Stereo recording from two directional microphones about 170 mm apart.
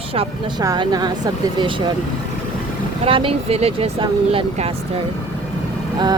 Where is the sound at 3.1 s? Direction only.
30° right (ahead or behind).